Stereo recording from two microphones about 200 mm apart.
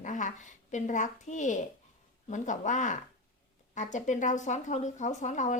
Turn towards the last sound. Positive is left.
turn(degrees=35)  # may be behind; listen again after turning